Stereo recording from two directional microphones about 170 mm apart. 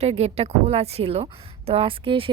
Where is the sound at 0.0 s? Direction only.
35° right (ahead or behind).